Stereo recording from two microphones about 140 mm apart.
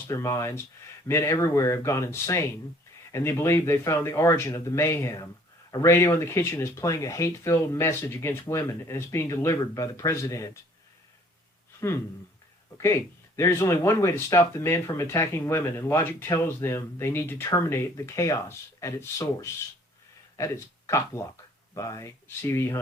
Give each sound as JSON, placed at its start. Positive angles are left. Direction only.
{"t": 0.1, "sound": "speech", "side_deg": 20}
{"t": 12.7, "sound": "speech", "side_deg": 20}